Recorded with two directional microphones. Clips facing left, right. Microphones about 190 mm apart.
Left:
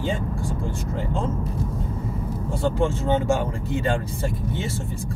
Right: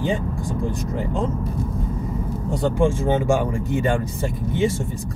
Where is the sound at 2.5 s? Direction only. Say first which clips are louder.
Right 3 dB; 15° right (ahead or behind).